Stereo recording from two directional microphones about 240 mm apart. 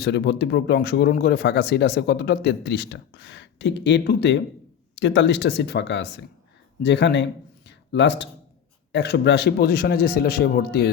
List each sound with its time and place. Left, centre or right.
0.0 s speech: left
7.7 s a sound: left
8.9 s a man's voice: left